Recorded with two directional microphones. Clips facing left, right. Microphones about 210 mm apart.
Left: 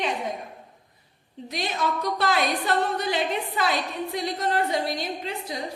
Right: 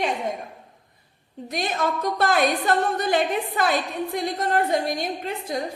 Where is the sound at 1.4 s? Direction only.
50° right (ahead or behind).